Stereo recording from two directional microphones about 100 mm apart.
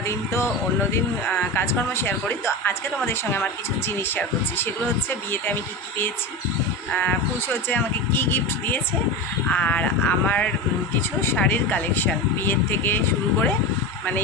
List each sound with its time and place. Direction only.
0.0 s a woman's voice: 30° left (ahead or behind)
6.9 s a woman's voice: 20° left (ahead or behind)